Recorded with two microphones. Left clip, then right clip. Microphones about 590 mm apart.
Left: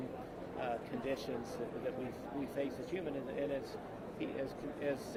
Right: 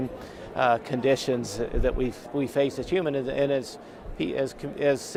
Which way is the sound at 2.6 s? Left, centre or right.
Right.